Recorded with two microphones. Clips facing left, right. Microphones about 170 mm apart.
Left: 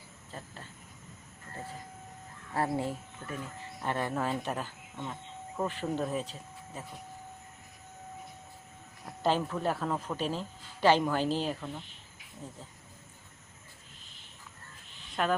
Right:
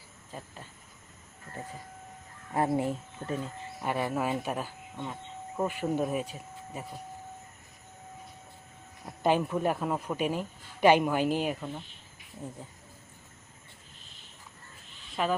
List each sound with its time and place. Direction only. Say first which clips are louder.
0.3 s speech: right 2 dB; 10° right (ahead or behind)
2.5 s speech: right 4 dB; 20° right (ahead or behind)
3.8 s a man's voice: right 2 dB; 10° right (ahead or behind)
9.2 s a man's voice: right 3 dB; 15° right (ahead or behind)
15.1 s speech: even; 5° right (ahead or behind)